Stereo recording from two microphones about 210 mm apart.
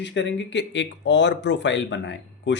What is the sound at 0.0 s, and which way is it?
Speech, 55° left (ahead or behind).